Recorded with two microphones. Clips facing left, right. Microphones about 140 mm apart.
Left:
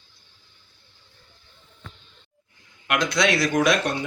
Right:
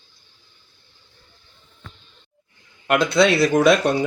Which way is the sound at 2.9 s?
30° right (ahead or behind).